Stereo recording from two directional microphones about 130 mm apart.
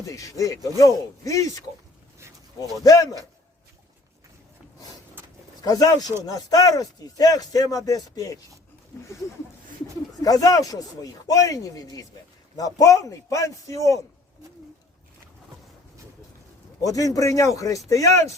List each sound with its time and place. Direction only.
0.0 s speech: 25° left (ahead or behind)
2.6 s speech: 25° left (ahead or behind)
5.6 s speech: 30° left (ahead or behind)
10.2 s speech: 30° left (ahead or behind)
16.8 s speech: 25° left (ahead or behind)